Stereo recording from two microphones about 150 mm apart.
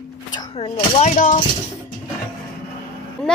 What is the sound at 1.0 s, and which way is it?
Speech, 55° left (ahead or behind).